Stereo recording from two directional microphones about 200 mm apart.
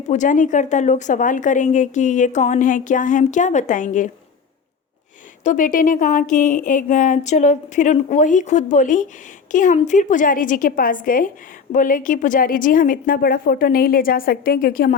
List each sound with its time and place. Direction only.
0.1 s a woman's voice: 40° left (ahead or behind)
5.4 s a woman's voice: 40° left (ahead or behind)